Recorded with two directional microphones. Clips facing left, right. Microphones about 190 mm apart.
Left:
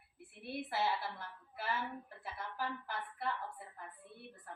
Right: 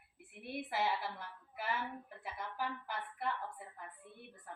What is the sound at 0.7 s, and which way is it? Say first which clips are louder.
Speech: even; 15° right (ahead or behind).